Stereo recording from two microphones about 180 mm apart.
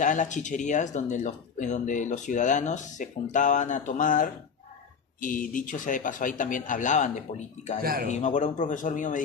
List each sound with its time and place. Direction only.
0.0 s speech: 45° left (ahead or behind)
7.8 s speech: 55° right (ahead or behind)
8.1 s speech: 45° left (ahead or behind)